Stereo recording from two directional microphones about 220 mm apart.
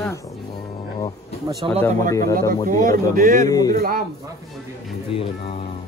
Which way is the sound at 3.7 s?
40° right (ahead or behind).